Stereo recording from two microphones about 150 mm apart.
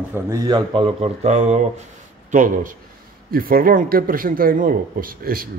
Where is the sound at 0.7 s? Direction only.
40° right (ahead or behind).